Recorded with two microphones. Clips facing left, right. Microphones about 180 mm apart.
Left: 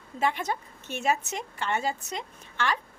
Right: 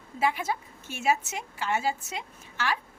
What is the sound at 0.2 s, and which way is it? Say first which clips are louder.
A woman's voice: even; 5° right (ahead or behind).